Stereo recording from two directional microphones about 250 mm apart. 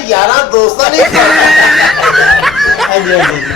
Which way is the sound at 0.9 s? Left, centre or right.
Centre.